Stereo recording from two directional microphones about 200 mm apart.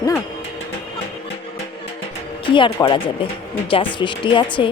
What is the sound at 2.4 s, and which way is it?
Speech, 25° left (ahead or behind).